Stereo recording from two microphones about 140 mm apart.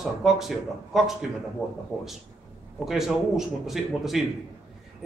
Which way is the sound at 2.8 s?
5° right (ahead or behind).